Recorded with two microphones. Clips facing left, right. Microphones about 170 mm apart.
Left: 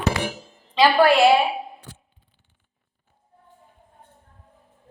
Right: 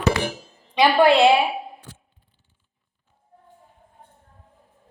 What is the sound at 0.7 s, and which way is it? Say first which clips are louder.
Speech: even; 20° right (ahead or behind).